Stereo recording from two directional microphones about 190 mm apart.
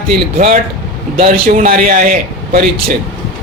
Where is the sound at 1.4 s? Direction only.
50° right (ahead or behind).